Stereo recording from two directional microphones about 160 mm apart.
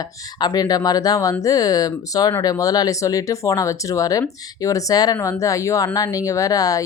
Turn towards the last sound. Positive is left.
turn(degrees=20)  # may be behind; listen again after turning